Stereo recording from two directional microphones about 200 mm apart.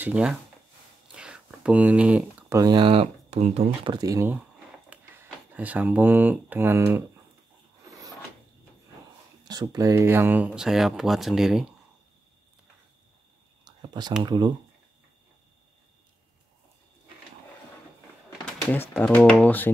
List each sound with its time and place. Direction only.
0.0 s speech: 5° right (ahead or behind)
1.1 s a sound: 5° right (ahead or behind)
2.6 s speech: 25° right (ahead or behind)
9.4 s speech: 20° right (ahead or behind); by 11.6 s centre (ahead or behind)
13.7 s a sound: 20° right (ahead or behind)
14.2 s speech: 20° right (ahead or behind)
18.4 s speech: 5° left (ahead or behind)